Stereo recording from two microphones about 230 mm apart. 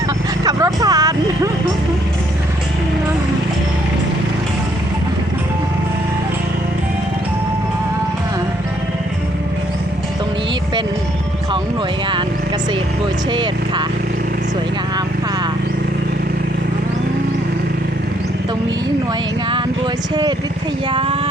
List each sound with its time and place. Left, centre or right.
0.4 s vehicle: centre
13.3 s vehicle: centre
20.9 s a sound: right